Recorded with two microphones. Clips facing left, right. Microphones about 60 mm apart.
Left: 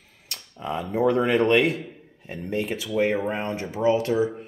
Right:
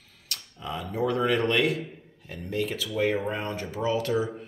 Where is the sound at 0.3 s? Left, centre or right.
Left.